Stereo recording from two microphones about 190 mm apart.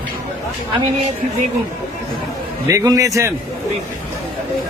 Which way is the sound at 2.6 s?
15° right (ahead or behind).